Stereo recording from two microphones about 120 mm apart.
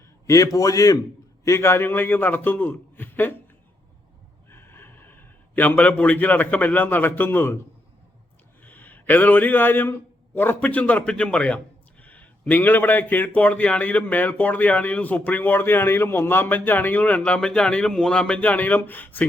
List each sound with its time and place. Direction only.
0.3 s a man's voice: 30° left (ahead or behind)
4.4 s a man's voice: 20° left (ahead or behind)
8.6 s a man's voice: 15° left (ahead or behind)